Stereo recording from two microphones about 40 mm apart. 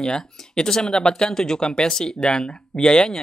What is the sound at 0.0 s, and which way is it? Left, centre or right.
Speech, centre.